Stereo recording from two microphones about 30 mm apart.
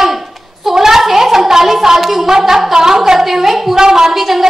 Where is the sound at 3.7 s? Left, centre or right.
Right.